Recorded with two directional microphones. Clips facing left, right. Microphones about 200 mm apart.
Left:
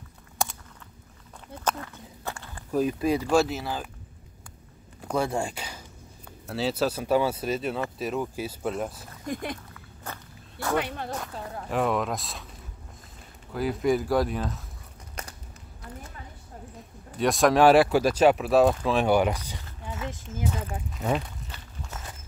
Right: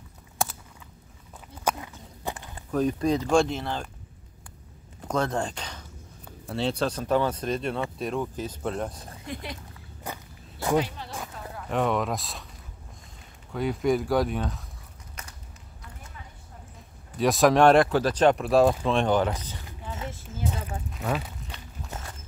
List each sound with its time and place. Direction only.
0.4 s a sound: 5° right (ahead or behind)
1.6 s walk: 10° right (ahead or behind)
2.7 s speech: 5° left (ahead or behind)
5.1 s speech: 10° left (ahead or behind)
9.2 s speech: 50° left (ahead or behind)
10.0 s walk: 15° right (ahead or behind)
10.8 s speech: 60° left (ahead or behind)
11.4 s a sound: 30° left (ahead or behind)
11.7 s speech: centre (ahead or behind)
13.5 s speech: centre (ahead or behind)
17.2 s speech: centre (ahead or behind)
20.1 s a sound: 15° left (ahead or behind)
20.9 s a sound: centre (ahead or behind)